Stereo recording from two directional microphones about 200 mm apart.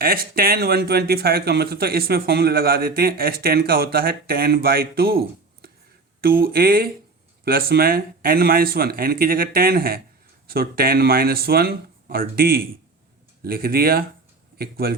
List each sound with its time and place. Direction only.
0.0 s speech: 50° right (ahead or behind)
6.4 s speech: 50° right (ahead or behind)